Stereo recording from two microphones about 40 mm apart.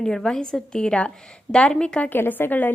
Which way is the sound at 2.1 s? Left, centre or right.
Left.